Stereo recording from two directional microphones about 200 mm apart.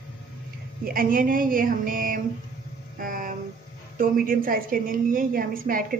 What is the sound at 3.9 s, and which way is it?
A woman's voice, 45° right (ahead or behind).